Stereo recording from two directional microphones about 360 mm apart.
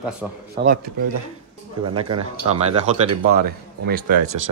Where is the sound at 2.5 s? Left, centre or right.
Centre.